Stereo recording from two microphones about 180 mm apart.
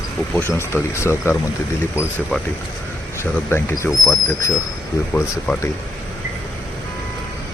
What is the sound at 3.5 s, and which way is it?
Speech, 15° left (ahead or behind).